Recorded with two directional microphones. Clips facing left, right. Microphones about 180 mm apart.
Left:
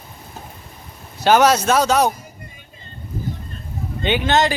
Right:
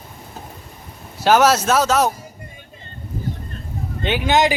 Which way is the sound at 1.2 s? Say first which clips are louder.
Even; 5° right (ahead or behind).